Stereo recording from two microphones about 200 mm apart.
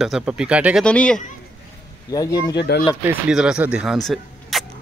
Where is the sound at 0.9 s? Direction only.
5° left (ahead or behind).